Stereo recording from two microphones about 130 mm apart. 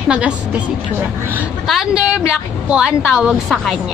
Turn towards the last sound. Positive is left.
turn(degrees=0)  # may be behind; listen again after turning